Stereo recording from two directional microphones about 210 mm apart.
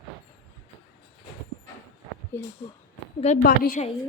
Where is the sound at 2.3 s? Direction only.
10° left (ahead or behind).